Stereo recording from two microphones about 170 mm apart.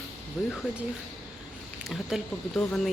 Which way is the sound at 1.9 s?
Centre (ahead or behind).